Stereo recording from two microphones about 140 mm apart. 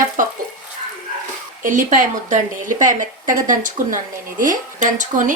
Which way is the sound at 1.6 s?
70° right (ahead or behind).